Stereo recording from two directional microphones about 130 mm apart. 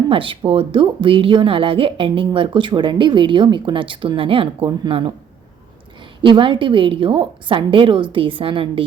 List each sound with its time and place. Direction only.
0.1 s a woman's voice: 45° right (ahead or behind)
6.2 s a woman's voice: 40° right (ahead or behind)